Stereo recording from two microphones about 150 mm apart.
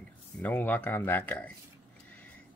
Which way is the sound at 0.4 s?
10° left (ahead or behind).